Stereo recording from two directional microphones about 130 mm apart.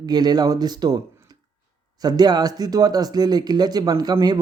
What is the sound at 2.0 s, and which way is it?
Speech, 30° right (ahead or behind).